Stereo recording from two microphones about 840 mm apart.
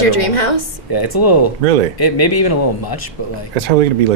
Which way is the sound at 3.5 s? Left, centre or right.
Right.